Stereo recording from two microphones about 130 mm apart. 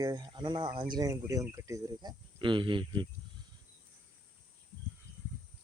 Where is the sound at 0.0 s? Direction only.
30° right (ahead or behind).